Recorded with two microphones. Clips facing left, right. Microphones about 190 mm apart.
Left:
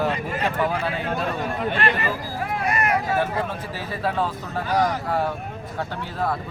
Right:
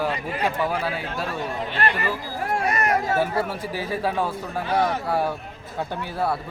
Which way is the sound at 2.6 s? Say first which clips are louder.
Left 1 dB; 35° right (ahead or behind).